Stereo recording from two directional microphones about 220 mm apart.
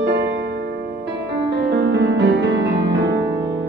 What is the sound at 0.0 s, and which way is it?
Music, 50° right (ahead or behind).